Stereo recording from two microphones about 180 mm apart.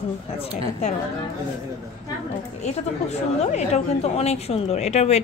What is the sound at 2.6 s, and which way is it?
A woman's voice, 40° left (ahead or behind).